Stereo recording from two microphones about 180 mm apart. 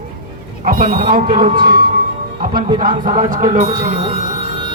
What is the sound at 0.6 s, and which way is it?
Speech, 50° right (ahead or behind).